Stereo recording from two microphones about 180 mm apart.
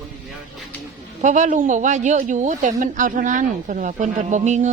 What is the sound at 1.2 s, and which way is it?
A woman's voice, 45° right (ahead or behind).